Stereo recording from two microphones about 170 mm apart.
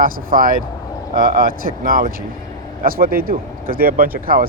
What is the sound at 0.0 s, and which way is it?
Speech, 55° right (ahead or behind).